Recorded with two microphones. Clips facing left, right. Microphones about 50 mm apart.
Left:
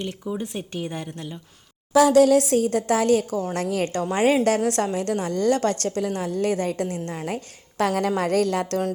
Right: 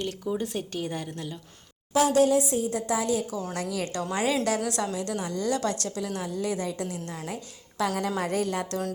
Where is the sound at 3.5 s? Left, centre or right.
Left.